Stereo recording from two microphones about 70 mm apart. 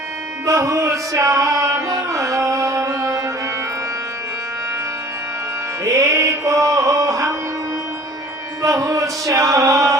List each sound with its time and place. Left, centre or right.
0.4 s music: right
5.8 s music: right
8.6 s music: right